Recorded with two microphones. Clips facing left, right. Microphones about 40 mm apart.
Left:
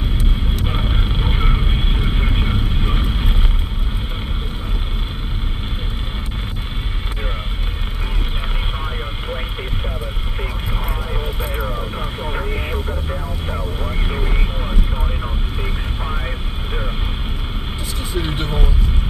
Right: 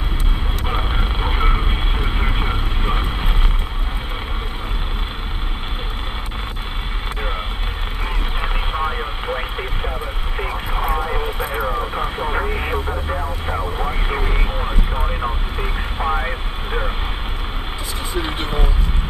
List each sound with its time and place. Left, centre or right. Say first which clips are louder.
0.7 s vehicle: right 4 dB; centre
8.4 s vehicle: right 7 dB; centre
18.1 s vehicle: even; centre